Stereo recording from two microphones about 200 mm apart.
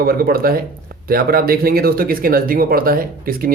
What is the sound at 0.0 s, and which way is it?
Speech, 50° right (ahead or behind).